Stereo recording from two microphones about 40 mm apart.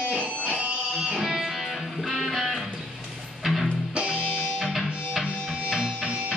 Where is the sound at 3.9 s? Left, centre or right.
Right.